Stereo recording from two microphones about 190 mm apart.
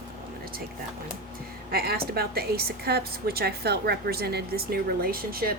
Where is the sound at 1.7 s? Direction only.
55° right (ahead or behind).